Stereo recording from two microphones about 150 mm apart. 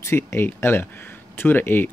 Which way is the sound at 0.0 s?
15° left (ahead or behind).